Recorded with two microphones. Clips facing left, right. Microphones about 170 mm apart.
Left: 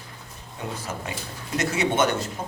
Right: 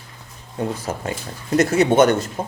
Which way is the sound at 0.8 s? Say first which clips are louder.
Right 6 dB; 50° right (ahead or behind).